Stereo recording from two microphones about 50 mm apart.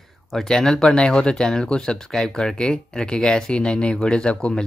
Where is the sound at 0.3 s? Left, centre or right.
Centre.